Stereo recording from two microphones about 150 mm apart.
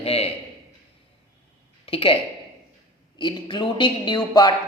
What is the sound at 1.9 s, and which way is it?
Speech, 35° left (ahead or behind).